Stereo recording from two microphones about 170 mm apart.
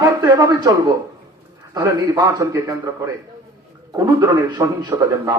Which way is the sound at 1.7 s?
20° right (ahead or behind).